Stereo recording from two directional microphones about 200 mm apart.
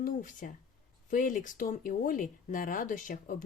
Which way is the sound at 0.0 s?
40° left (ahead or behind).